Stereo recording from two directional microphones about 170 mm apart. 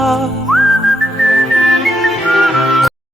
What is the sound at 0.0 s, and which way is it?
Whistling, centre (ahead or behind).